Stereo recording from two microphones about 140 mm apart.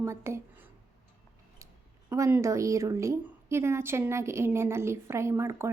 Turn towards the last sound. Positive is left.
turn(degrees=-20)  # may be behind; listen again after turning